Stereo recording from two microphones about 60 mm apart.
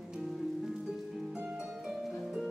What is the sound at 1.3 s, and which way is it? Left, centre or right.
Harp, right.